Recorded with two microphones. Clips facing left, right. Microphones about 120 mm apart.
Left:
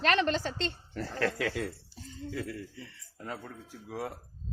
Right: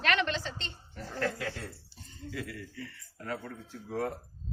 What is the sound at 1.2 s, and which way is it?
Speech, 90° left.